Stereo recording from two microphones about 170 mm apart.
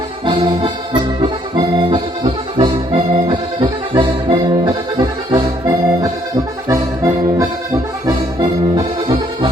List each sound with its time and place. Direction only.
0.3 s music: 30° right (ahead or behind)
1.2 s accordion: 30° right (ahead or behind)